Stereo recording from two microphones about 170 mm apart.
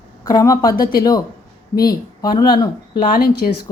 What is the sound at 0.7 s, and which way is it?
Speech, 60° left (ahead or behind).